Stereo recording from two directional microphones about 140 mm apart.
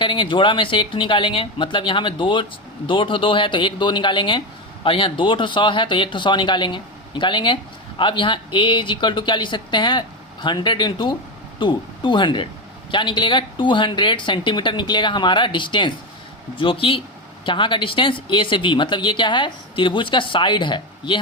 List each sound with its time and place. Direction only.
0.0 s speech: 35° left (ahead or behind)